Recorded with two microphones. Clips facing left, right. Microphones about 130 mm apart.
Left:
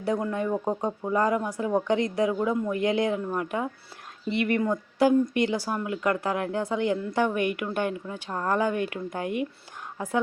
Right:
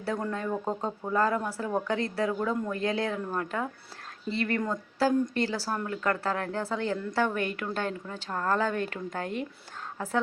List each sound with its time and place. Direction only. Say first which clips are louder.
0.0 s speech: left 4 dB; 15° left (ahead or behind)